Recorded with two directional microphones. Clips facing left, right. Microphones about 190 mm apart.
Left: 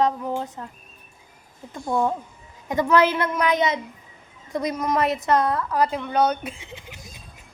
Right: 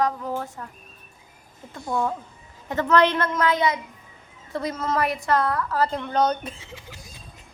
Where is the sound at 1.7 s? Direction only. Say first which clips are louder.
Left 3 dB; 20° left (ahead or behind).